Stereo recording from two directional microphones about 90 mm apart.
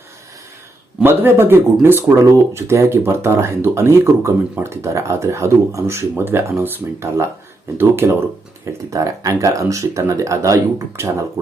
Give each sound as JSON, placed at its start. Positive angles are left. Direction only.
{"t": 1.0, "sound": "speech", "side_deg": -25}
{"t": 8.9, "sound": "speech", "side_deg": -40}